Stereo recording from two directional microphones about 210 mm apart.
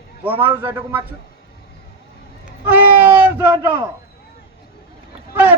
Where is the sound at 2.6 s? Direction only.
10° right (ahead or behind).